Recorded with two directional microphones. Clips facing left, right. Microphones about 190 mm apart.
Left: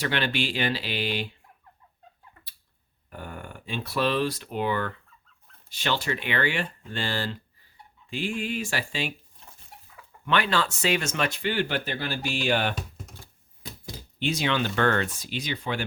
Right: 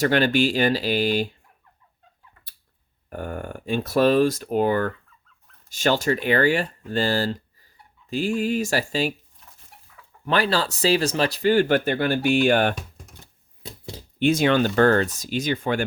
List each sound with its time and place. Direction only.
0.0 s speech: 45° right (ahead or behind)
3.1 s speech: 50° right (ahead or behind)
10.2 s speech: 35° right (ahead or behind)
14.2 s speech: 50° right (ahead or behind)